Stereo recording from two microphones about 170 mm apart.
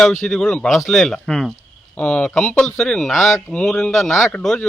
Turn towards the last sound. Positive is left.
turn(degrees=5)  # may be behind; listen again after turning